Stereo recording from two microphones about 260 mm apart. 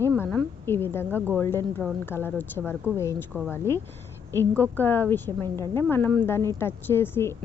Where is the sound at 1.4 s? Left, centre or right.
Centre.